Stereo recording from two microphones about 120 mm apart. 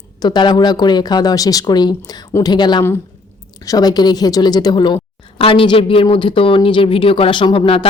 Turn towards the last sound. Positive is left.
turn(degrees=45)  # may be behind; listen again after turning